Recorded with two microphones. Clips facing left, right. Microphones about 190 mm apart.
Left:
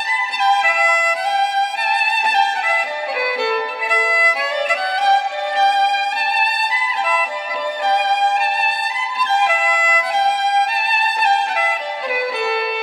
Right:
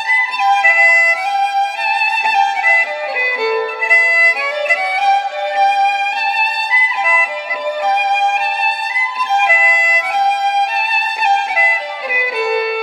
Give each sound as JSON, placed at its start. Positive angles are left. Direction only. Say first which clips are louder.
{"t": 0.6, "sound": "music", "louder": "right 1 dB", "side_deg": -10}
{"t": 2.3, "sound": "music", "louder": "right 4 dB", "side_deg": -10}
{"t": 3.3, "sound": "violin", "louder": "right 4 dB", "side_deg": -10}
{"t": 6.7, "sound": "music", "louder": "right 1 dB", "side_deg": -10}
{"t": 9.4, "sound": "violin", "louder": "right 1 dB", "side_deg": -10}
{"t": 11.2, "sound": "music", "louder": "right 3 dB", "side_deg": -10}